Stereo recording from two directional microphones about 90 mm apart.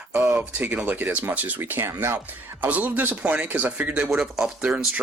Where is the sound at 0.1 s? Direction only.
20° right (ahead or behind).